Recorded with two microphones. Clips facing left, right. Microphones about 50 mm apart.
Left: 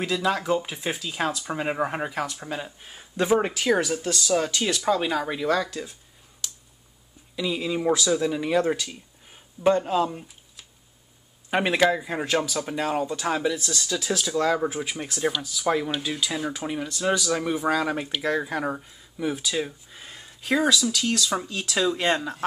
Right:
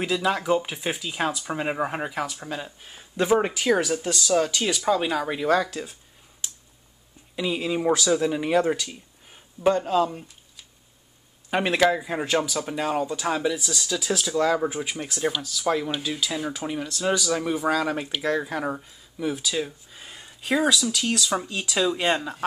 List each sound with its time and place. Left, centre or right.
0.0 s speech: centre
6.4 s a sound: right
7.3 s speech: centre
8.6 s speech: centre